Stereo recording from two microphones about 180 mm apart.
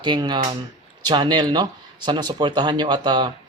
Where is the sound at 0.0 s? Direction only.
25° right (ahead or behind).